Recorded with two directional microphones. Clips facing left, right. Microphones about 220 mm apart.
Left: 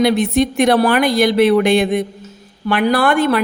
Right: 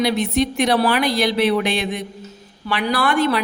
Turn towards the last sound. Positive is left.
turn(degrees=55)  # may be behind; listen again after turning